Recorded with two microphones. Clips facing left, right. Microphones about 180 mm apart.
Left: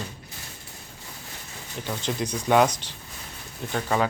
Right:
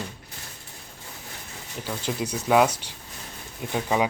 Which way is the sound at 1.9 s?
10° right (ahead or behind).